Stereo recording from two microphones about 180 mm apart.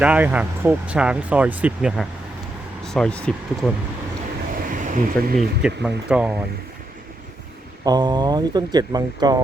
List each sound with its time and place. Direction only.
0.0 s speech: 10° right (ahead or behind)
4.5 s a sound: 50° right (ahead or behind)
5.4 s speech: 5° right (ahead or behind)
7.9 s speech: 20° right (ahead or behind)